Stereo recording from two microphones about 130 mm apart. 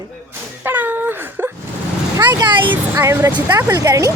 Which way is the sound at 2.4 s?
35° right (ahead or behind).